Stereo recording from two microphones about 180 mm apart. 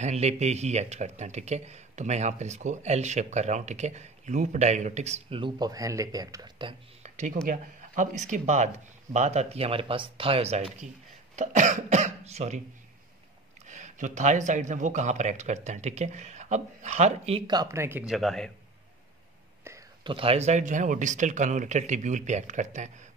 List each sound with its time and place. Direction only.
0.0 s speech: 40° right (ahead or behind); by 6.7 s 20° right (ahead or behind)
7.0 s a sound: 40° right (ahead or behind)
7.4 s speech: 45° right (ahead or behind)
13.7 s speech: 40° right (ahead or behind)
17.5 s speech: 20° right (ahead or behind)
18.1 s speech: centre (ahead or behind)
20.0 s speech: 30° right (ahead or behind)